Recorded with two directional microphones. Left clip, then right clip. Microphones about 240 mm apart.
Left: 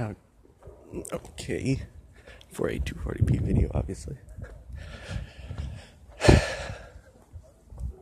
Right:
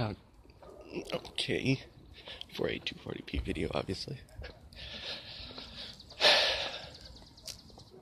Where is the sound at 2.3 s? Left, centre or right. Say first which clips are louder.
Left 4 dB; centre.